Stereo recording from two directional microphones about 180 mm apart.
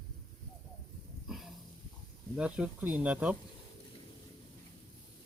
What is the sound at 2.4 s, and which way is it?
Speech, 5° right (ahead or behind).